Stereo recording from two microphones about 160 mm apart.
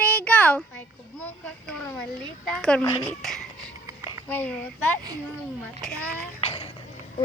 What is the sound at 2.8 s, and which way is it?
Speech, 25° left (ahead or behind).